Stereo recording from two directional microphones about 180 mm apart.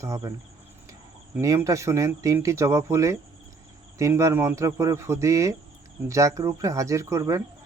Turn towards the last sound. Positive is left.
turn(degrees=-15)  # may be behind; listen again after turning